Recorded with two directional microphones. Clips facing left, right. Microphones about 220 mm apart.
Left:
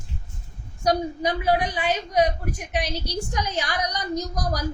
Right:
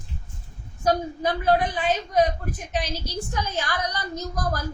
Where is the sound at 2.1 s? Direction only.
15° left (ahead or behind).